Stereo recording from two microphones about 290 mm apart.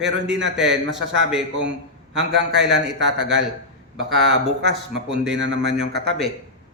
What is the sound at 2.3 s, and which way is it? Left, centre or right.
A man's voice, right.